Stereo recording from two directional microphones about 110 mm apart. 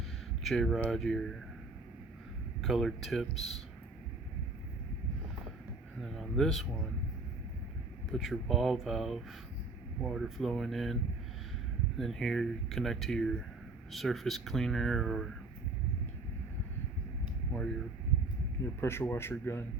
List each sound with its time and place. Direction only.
0.4 s speech: centre (ahead or behind)
2.6 s speech: centre (ahead or behind)
6.0 s speech: centre (ahead or behind)
8.1 s speech: centre (ahead or behind)
11.9 s speech: 5° left (ahead or behind)
17.5 s speech: 5° left (ahead or behind)
18.6 s speech: 20° left (ahead or behind)